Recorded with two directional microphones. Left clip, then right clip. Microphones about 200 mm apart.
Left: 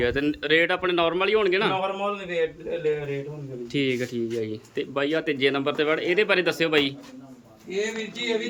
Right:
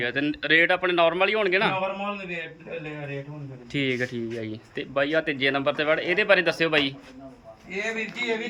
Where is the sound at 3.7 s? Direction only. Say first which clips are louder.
Even; 10° left (ahead or behind).